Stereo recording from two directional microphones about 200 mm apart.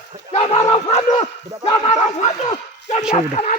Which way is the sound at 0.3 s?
30° left (ahead or behind).